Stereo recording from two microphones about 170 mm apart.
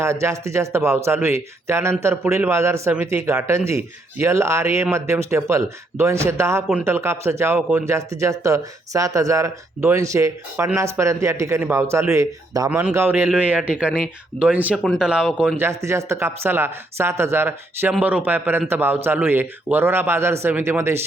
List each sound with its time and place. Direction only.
0.0 s speech: 15° right (ahead or behind)
15.5 s speech: 15° right (ahead or behind)